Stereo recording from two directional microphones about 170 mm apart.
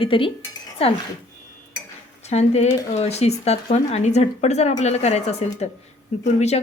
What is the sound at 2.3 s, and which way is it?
Speech, 40° left (ahead or behind).